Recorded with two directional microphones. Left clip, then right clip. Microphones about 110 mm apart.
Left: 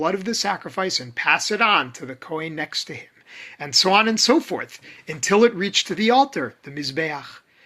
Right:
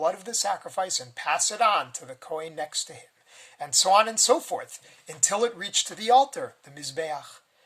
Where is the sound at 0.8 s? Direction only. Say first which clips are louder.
Left 8 dB; 45° right (ahead or behind).